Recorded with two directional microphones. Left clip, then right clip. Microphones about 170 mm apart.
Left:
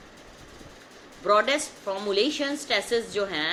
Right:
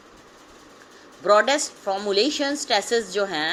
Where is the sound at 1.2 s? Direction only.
35° right (ahead or behind).